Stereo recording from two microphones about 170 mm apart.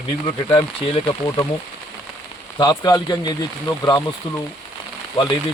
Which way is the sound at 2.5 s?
25° left (ahead or behind).